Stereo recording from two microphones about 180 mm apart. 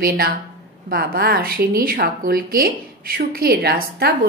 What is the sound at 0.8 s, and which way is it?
A woman's voice, 55° right (ahead or behind).